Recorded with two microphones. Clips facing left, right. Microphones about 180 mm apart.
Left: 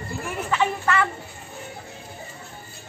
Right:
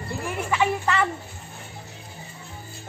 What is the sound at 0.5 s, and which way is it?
Speech, 10° right (ahead or behind).